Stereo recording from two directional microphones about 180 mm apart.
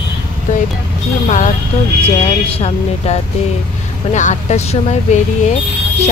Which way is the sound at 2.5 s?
35° left (ahead or behind).